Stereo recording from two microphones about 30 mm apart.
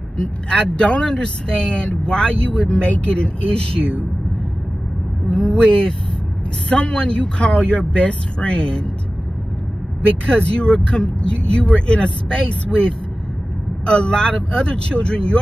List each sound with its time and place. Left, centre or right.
0.5 s speech: left
5.5 s speech: left
10.0 s speech: left
13.8 s speech: left